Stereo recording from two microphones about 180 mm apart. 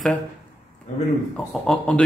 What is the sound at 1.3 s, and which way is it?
Speech, 5° left (ahead or behind).